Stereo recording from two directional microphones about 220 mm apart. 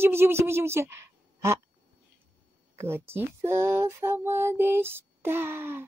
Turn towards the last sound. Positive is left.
turn(degrees=-10)  # may be behind; listen again after turning